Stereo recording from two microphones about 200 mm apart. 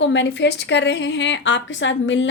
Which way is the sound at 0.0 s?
60° left (ahead or behind).